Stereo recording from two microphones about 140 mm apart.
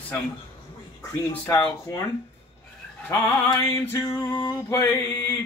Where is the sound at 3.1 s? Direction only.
25° left (ahead or behind).